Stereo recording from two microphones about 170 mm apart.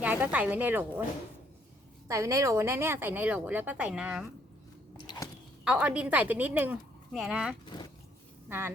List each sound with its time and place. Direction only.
0.0 s a woman's voice: 10° right (ahead or behind)
2.0 s a woman's voice: 20° right (ahead or behind)
4.9 s a sound: 25° left (ahead or behind)
5.6 s a woman's voice: 5° right (ahead or behind)
7.6 s speech: 25° left (ahead or behind)
8.4 s a woman's voice: 15° right (ahead or behind)